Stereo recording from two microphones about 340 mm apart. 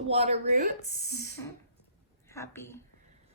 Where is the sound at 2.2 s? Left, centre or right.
Centre.